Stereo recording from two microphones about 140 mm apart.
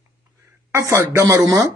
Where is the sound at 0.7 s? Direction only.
20° right (ahead or behind).